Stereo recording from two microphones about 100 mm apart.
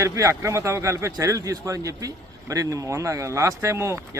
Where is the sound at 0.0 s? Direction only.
30° right (ahead or behind).